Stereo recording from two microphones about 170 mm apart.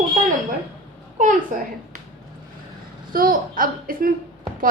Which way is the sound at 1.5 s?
50° right (ahead or behind).